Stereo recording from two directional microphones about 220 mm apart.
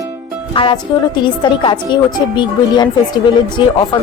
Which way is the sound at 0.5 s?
20° left (ahead or behind).